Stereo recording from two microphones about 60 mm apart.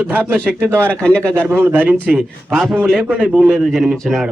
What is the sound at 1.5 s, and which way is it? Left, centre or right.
Speech, right.